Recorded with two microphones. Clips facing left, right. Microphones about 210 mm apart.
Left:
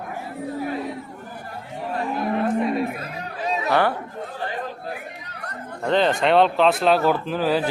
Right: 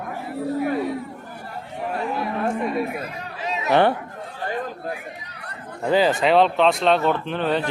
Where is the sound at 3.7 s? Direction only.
25° right (ahead or behind).